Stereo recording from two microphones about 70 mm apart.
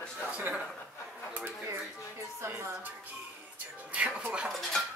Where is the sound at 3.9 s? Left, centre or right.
Centre.